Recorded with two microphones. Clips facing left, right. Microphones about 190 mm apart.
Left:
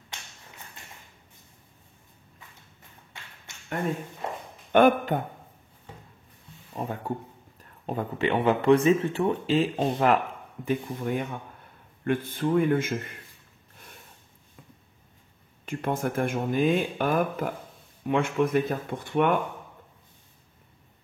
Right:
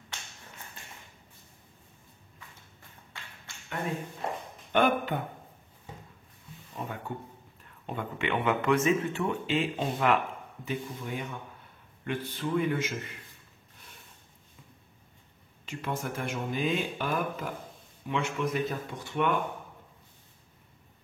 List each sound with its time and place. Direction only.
4.7 s speech: 45° left (ahead or behind)
6.7 s speech: 35° left (ahead or behind); by 13.2 s 50° left (ahead or behind)
15.6 s speech: 50° left (ahead or behind)